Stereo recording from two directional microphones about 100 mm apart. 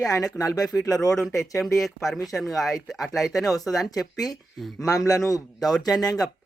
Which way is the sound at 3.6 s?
Centre (ahead or behind).